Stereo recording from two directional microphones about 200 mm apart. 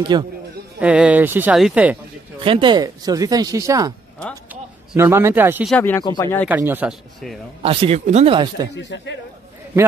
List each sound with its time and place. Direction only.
0.1 s speech: 20° right (ahead or behind)
0.7 s speech: 5° right (ahead or behind)
2.4 s speech: 25° right (ahead or behind); by 5.7 s 10° right (ahead or behind)
5.7 s speech: 10° left (ahead or behind)
6.0 s speech: 20° left (ahead or behind)
6.5 s speech: 10° right (ahead or behind)
7.6 s speech: 30° right (ahead or behind)
8.7 s speech: 65° left (ahead or behind)